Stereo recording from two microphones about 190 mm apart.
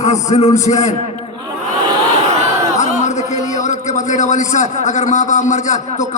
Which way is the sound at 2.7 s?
40° left (ahead or behind).